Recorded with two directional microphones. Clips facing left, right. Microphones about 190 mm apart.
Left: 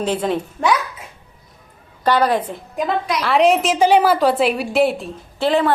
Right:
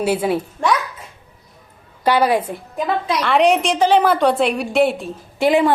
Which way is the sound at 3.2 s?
Centre (ahead or behind).